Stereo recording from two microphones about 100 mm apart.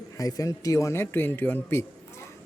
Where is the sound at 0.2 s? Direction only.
35° left (ahead or behind); by 1.8 s 20° left (ahead or behind).